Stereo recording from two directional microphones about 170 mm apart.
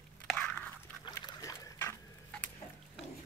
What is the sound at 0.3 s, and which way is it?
Biting, 5° left (ahead or behind).